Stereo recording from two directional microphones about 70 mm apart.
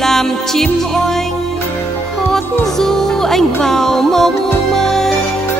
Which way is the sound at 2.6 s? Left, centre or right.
Centre.